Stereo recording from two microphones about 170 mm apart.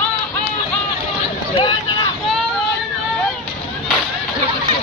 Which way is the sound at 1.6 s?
30° left (ahead or behind).